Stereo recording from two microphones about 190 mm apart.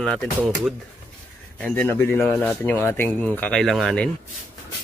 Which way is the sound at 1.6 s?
10° left (ahead or behind).